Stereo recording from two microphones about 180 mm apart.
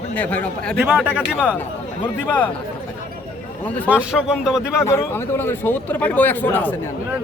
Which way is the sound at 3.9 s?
5° right (ahead or behind).